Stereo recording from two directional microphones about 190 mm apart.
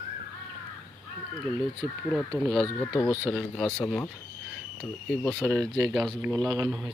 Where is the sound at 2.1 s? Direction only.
Centre (ahead or behind).